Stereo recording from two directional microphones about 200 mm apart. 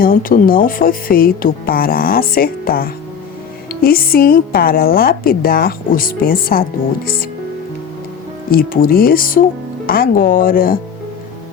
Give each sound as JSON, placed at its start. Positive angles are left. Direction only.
{"t": 0.0, "sound": "speech", "side_deg": 45}
{"t": 8.4, "sound": "speech", "side_deg": 45}